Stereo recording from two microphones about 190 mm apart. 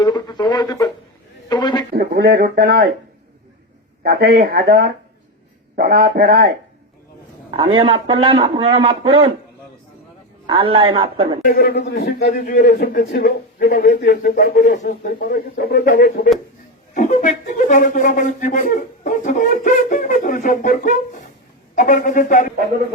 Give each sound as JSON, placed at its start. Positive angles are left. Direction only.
{"t": 0.0, "sound": "a sound", "side_deg": 20}
{"t": 1.9, "sound": "speech", "side_deg": -55}
{"t": 4.0, "sound": "speech", "side_deg": -55}
{"t": 7.5, "sound": "a man's voice", "side_deg": -25}
{"t": 10.4, "sound": "a man's voice", "side_deg": -25}
{"t": 11.4, "sound": "a man's voice", "side_deg": 50}